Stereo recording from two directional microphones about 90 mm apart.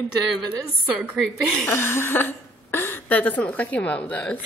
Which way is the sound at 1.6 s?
30° left (ahead or behind).